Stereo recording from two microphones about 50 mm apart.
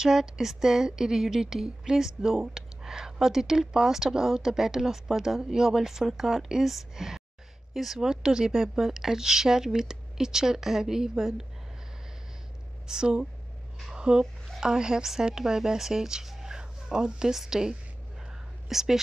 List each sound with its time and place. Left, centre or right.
0.0 s a woman's voice: centre
12.8 s a woman's voice: centre